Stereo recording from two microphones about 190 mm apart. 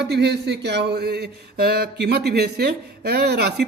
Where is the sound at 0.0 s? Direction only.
60° right (ahead or behind).